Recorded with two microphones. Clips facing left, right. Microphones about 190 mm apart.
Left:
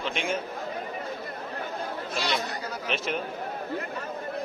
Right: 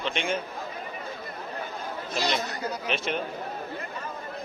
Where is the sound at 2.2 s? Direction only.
40° right (ahead or behind).